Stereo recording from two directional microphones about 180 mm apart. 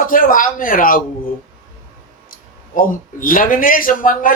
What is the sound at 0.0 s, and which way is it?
A man's voice, 50° left (ahead or behind).